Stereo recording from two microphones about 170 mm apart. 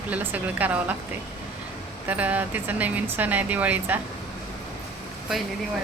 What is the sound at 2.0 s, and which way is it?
Speech, 10° right (ahead or behind).